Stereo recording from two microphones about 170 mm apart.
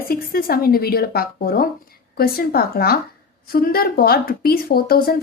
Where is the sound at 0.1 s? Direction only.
60° left (ahead or behind).